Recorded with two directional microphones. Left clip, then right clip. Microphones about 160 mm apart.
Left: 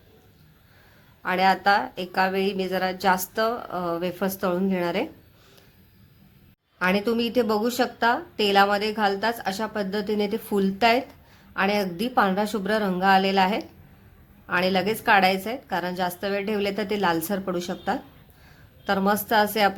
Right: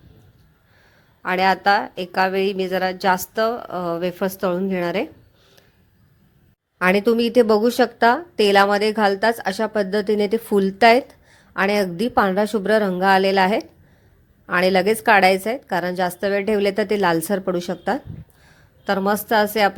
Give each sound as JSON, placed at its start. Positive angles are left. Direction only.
{"t": 1.2, "sound": "speech", "side_deg": -35}
{"t": 6.7, "sound": "speech", "side_deg": -40}